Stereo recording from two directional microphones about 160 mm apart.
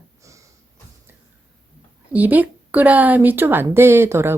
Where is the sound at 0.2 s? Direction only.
20° right (ahead or behind).